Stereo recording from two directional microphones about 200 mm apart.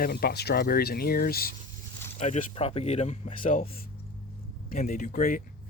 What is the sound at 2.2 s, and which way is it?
Speech, 35° left (ahead or behind).